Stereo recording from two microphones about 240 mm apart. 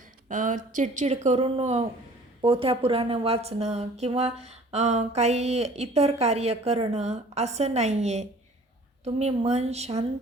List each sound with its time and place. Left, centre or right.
0.3 s a woman's voice: right